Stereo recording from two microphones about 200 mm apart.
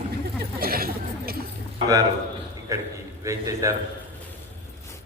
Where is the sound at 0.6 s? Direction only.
50° right (ahead or behind).